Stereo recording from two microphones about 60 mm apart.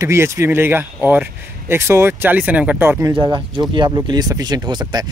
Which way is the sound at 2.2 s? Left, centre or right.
Right.